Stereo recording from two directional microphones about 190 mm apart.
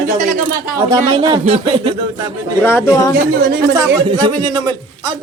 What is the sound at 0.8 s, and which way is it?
A man's voice, 25° right (ahead or behind).